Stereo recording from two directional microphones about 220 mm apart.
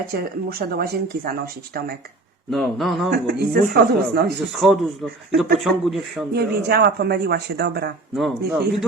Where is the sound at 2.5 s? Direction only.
Centre (ahead or behind).